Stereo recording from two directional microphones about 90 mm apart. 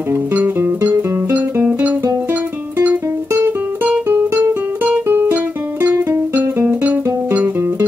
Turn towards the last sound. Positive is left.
turn(degrees=-25)  # may be behind; listen again after turning